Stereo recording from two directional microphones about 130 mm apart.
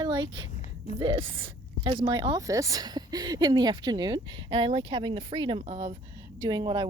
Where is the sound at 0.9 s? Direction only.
40° right (ahead or behind).